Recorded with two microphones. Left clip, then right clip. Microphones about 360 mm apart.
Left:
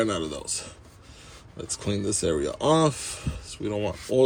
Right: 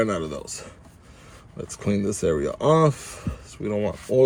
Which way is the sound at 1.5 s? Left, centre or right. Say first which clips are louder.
Right 3 dB; right.